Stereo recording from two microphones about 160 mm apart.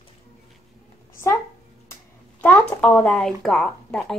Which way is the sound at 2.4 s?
10° left (ahead or behind).